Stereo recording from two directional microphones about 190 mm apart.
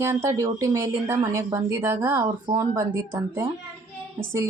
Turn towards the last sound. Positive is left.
turn(degrees=-15)  # may be behind; listen again after turning